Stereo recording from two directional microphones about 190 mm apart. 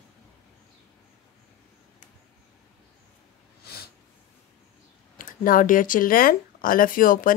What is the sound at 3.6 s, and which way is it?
Snort, 55° left (ahead or behind).